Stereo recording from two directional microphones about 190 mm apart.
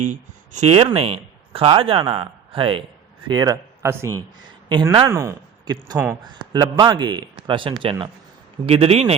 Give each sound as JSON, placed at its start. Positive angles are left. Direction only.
{"t": 0.0, "sound": "speech", "side_deg": -40}
{"t": 6.4, "sound": "speech", "side_deg": -25}